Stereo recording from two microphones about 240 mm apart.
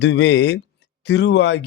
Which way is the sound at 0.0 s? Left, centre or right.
Left.